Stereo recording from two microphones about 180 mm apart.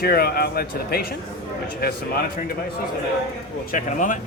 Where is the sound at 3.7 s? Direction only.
45° left (ahead or behind).